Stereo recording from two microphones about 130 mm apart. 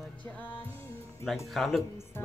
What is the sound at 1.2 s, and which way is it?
Speech, centre (ahead or behind).